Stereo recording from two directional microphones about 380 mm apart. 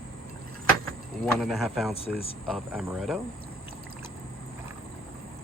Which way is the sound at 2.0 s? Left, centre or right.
Centre.